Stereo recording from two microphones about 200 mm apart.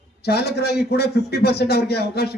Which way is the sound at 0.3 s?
55° left (ahead or behind).